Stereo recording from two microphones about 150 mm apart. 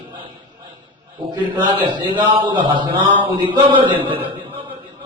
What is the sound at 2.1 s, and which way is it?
A man's voice, 35° right (ahead or behind).